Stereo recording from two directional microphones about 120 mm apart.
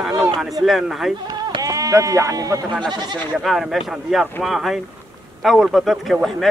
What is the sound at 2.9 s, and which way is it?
Speech, 35° right (ahead or behind).